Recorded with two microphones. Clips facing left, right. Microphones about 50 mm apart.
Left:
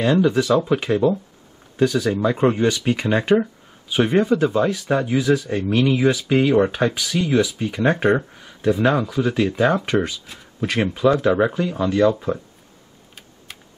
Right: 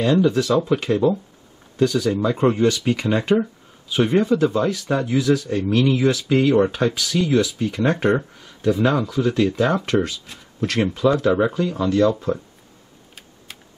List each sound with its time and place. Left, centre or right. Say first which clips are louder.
0.0 s speech: even; centre